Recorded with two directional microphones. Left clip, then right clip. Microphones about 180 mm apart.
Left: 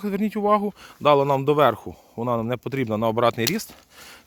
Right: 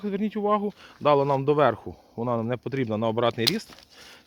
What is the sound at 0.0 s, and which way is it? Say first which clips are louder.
Speech: left 3 dB; 45° left (ahead or behind).